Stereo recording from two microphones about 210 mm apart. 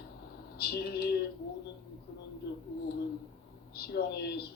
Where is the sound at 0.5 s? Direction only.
50° left (ahead or behind).